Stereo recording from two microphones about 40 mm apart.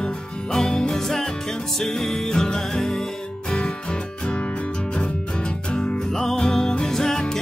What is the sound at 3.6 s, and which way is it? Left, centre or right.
Music, left.